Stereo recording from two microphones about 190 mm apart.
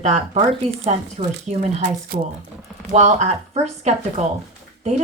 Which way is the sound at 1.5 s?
35° right (ahead or behind).